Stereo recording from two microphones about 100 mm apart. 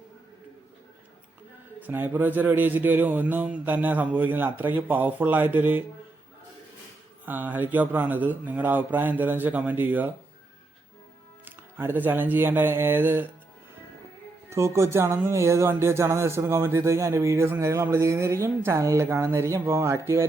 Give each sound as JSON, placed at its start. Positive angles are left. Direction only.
{"t": 1.8, "sound": "a man's voice", "side_deg": -20}
{"t": 7.3, "sound": "speech", "side_deg": -20}
{"t": 11.4, "sound": "a man's voice", "side_deg": -20}
{"t": 14.5, "sound": "a man's voice", "side_deg": -30}